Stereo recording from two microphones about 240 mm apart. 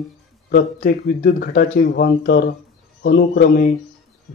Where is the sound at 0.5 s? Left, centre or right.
Left.